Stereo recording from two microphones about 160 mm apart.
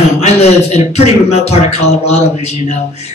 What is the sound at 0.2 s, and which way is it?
Speech, 40° left (ahead or behind).